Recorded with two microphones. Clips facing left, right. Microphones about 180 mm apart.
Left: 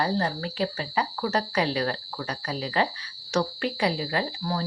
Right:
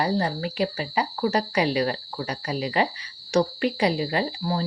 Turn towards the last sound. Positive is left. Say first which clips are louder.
# right 3 dB
turn(degrees=-20)  # may be behind; listen again after turning